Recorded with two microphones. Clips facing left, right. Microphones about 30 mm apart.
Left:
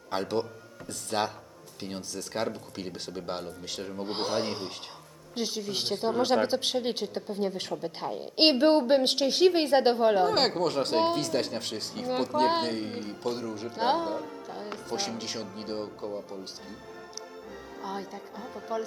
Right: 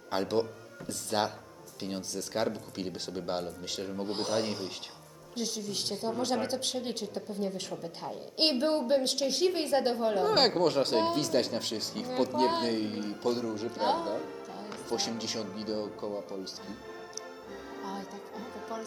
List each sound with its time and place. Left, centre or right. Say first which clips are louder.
0.1 s speech: even; centre
4.0 s speech: left 2 dB; left
5.3 s a woman's voice: left 3 dB; left
10.2 s speech: even; centre
13.7 s speech: left 4 dB; left
14.8 s speech: right 1 dB; centre
17.8 s speech: left 5 dB; left